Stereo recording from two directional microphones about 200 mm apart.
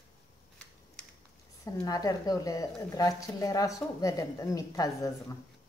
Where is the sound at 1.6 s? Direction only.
15° left (ahead or behind).